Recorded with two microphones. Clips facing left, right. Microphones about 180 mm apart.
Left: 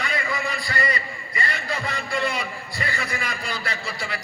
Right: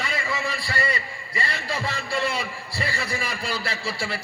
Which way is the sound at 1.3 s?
30° right (ahead or behind).